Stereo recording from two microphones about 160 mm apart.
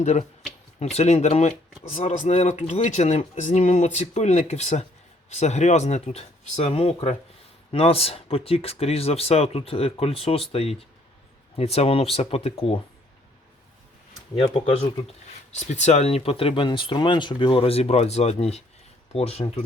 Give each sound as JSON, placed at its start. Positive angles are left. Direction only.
{"t": 0.0, "sound": "speech", "side_deg": 45}
{"t": 14.3, "sound": "speech", "side_deg": 40}